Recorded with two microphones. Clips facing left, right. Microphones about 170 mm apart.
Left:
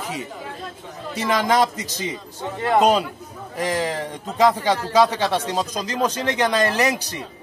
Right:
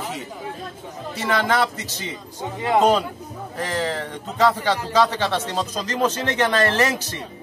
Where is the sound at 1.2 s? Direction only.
15° left (ahead or behind).